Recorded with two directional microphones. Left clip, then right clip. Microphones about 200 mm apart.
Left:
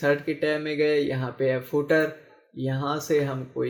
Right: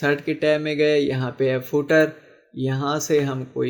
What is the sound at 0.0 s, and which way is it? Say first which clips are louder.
Speech: right 3 dB; 45° right (ahead or behind).